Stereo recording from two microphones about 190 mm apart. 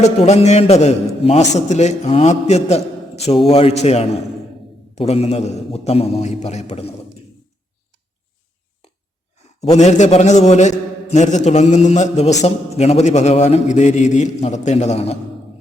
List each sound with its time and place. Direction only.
0.0 s a man's voice: 35° left (ahead or behind)
9.3 s a man's voice: 35° left (ahead or behind)